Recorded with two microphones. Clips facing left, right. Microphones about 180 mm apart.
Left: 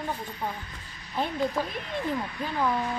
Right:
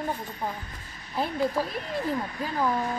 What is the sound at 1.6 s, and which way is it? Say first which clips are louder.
Speech: right 1 dB; 40° right (ahead or behind).